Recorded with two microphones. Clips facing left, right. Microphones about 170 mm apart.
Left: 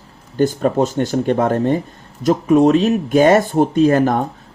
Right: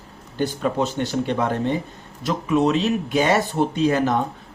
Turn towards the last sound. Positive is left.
turn(degrees=50)  # may be behind; listen again after turning